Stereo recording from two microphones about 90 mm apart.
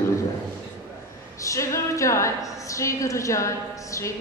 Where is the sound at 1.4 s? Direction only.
35° left (ahead or behind).